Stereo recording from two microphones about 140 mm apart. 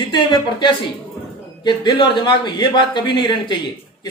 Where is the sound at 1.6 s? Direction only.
35° left (ahead or behind).